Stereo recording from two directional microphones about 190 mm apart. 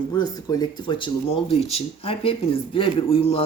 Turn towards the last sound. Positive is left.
turn(degrees=30)  # may be behind; listen again after turning